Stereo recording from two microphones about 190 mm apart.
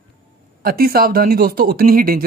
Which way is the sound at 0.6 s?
50° right (ahead or behind).